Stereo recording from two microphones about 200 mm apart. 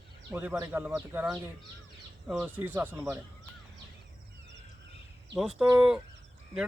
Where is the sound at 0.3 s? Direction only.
10° right (ahead or behind).